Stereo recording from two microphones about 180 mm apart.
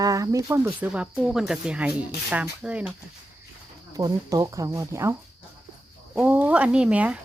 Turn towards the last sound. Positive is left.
turn(degrees=-5)  # may be behind; listen again after turning